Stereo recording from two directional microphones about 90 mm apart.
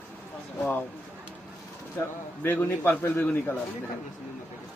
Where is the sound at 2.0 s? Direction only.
25° left (ahead or behind).